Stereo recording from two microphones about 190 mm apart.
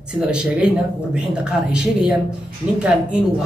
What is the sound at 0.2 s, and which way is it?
Speech, 5° right (ahead or behind).